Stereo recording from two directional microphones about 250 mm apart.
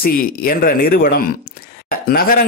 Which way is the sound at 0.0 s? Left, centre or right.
Left.